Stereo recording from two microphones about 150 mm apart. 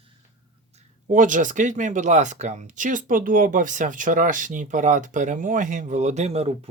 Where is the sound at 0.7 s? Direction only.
60° right (ahead or behind).